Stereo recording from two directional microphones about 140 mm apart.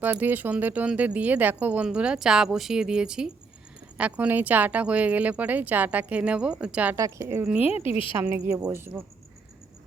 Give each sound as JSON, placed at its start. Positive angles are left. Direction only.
{"t": 0.0, "sound": "speech", "side_deg": -15}
{"t": 6.9, "sound": "speech", "side_deg": -20}
{"t": 7.4, "sound": "speech", "side_deg": -10}